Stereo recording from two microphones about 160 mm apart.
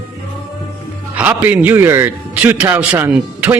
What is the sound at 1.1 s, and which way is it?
A man's voice, 10° right (ahead or behind).